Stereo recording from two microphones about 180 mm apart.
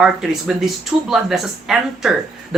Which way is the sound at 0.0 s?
Centre (ahead or behind).